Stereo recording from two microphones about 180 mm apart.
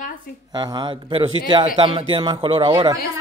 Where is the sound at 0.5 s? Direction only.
25° right (ahead or behind).